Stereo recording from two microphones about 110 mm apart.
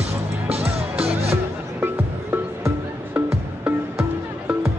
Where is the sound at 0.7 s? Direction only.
65° right (ahead or behind).